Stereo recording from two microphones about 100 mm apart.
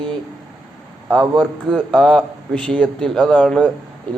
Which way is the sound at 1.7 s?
5° left (ahead or behind).